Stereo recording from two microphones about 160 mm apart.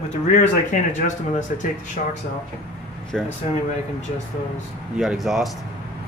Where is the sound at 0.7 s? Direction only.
50° left (ahead or behind).